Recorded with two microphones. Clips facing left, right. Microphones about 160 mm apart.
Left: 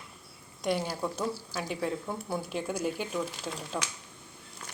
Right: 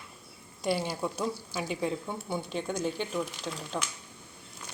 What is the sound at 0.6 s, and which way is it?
A woman's voice, 5° right (ahead or behind).